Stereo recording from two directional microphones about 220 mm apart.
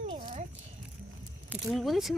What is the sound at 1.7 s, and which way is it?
Speech, centre (ahead or behind).